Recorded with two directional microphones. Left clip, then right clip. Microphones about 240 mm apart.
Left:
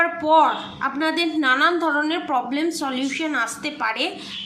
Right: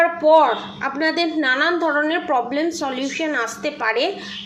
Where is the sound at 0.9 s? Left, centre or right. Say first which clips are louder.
Right 3 dB; centre.